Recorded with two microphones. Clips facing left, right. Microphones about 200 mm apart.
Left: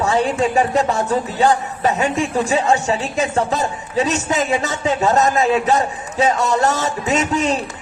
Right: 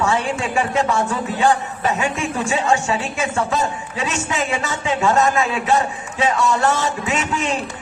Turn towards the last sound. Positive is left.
turn(degrees=40)  # may be behind; listen again after turning